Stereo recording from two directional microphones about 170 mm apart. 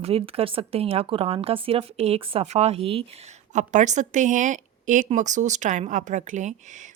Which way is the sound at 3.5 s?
45° right (ahead or behind).